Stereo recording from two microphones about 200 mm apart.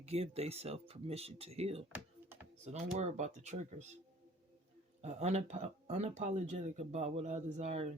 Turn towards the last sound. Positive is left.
turn(degrees=-35)  # may be behind; listen again after turning